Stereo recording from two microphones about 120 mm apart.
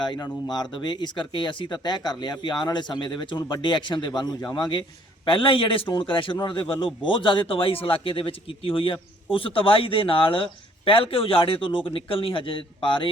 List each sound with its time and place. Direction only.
0.0 s a man's voice: 40° left (ahead or behind)